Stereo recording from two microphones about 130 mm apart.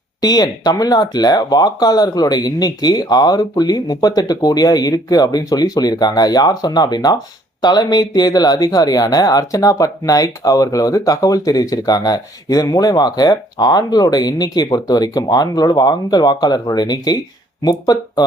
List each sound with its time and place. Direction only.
0.2 s speech: 30° left (ahead or behind)